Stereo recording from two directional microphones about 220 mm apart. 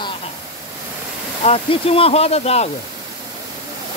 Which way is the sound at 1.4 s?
25° left (ahead or behind).